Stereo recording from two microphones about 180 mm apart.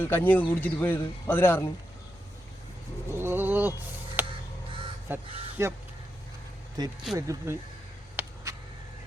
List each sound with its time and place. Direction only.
0.0 s a man's voice: 10° left (ahead or behind)
3.1 s bird: 15° right (ahead or behind)
4.2 s crow: 10° right (ahead or behind)
5.0 s speech: 15° right (ahead or behind)
6.8 s speech: 20° right (ahead or behind)
8.2 s a sound: 10° right (ahead or behind)